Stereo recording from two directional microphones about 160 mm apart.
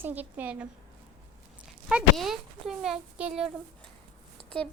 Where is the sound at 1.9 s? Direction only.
Centre (ahead or behind).